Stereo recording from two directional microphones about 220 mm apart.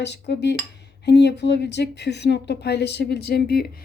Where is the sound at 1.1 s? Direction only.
50° left (ahead or behind).